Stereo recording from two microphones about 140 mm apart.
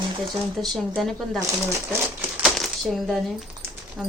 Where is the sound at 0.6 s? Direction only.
Centre (ahead or behind).